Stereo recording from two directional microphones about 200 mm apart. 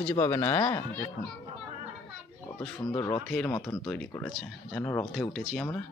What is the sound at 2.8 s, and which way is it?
Speech, 15° left (ahead or behind).